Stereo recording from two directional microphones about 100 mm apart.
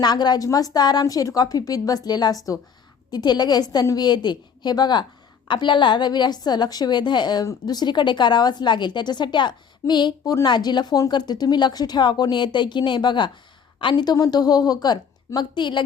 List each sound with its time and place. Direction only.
0.0 s a woman's voice: 45° left (ahead or behind)